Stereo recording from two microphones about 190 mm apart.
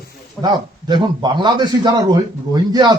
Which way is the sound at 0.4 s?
25° right (ahead or behind).